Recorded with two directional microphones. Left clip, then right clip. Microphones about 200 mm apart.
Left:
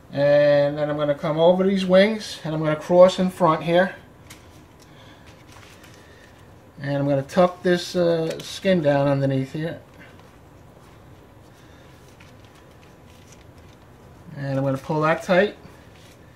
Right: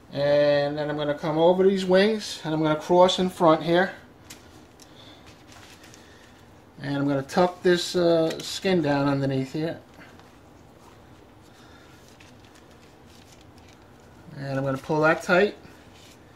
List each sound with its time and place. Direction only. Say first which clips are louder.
0.1 s speech: left 4 dB; 20° right (ahead or behind)
6.8 s speech: left 4 dB; 20° right (ahead or behind)
14.4 s speech: left 3 dB; 20° right (ahead or behind)